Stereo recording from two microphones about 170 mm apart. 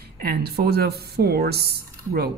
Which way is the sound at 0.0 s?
65° right (ahead or behind).